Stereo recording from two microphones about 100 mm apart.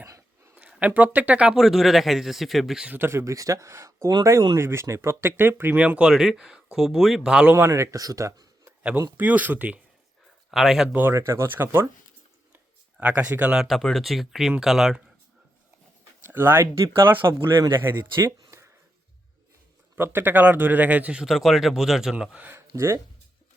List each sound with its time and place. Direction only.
0.0 s a sound: 25° right (ahead or behind)
0.5 s speech: 15° right (ahead or behind)
2.9 s speech: 25° right (ahead or behind); by 7.5 s 10° right (ahead or behind)
7.5 s speech: 30° right (ahead or behind)
9.1 s speech: 15° right (ahead or behind)
10.5 s speech: 5° right (ahead or behind)
10.9 s speech: 20° right (ahead or behind)
13.0 s speech: 15° right (ahead or behind)
13.7 s speech: 5° left (ahead or behind)
16.2 s speech: 20° right (ahead or behind)
20.0 s speech: 20° right (ahead or behind)
22.4 s speech: 25° right (ahead or behind)